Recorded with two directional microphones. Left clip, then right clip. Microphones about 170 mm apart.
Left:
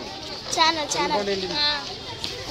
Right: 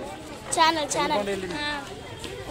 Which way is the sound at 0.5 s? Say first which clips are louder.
Even; 30° right (ahead or behind).